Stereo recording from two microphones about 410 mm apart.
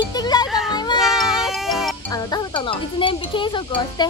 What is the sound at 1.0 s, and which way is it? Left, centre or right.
Music, centre.